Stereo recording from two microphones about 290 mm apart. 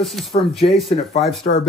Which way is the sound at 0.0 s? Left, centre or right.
Centre.